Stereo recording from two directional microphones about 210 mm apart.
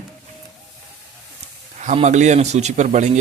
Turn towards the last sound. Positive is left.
turn(degrees=-35)  # may be behind; listen again after turning